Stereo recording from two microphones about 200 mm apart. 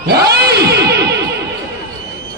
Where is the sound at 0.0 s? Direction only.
55° right (ahead or behind).